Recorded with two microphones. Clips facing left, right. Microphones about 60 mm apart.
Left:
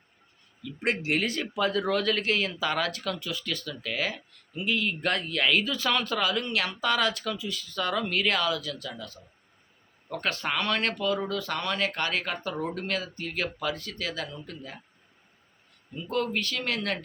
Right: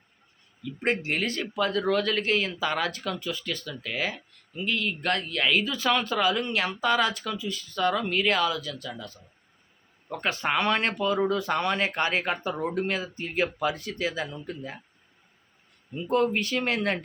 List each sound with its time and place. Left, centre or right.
0.6 s speech: centre
4.5 s speech: centre
10.5 s speech: centre
16.0 s speech: right